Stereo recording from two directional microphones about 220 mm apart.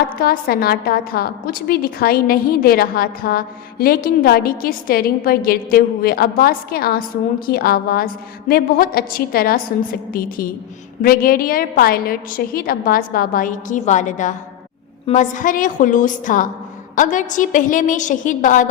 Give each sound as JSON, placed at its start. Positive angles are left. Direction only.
{"t": 0.2, "sound": "a woman's voice", "side_deg": 40}